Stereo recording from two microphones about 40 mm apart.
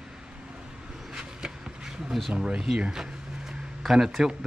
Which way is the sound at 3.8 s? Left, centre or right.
Centre.